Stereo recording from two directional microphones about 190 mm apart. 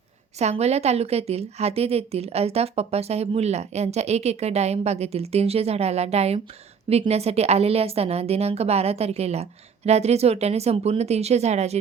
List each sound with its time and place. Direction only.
0.3 s a woman's voice: 35° right (ahead or behind)